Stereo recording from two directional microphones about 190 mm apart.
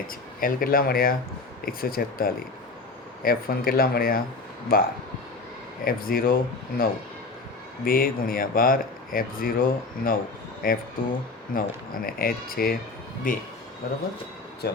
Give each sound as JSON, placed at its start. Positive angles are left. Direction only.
{"t": 0.1, "sound": "speech", "side_deg": 50}
{"t": 13.8, "sound": "speech", "side_deg": 50}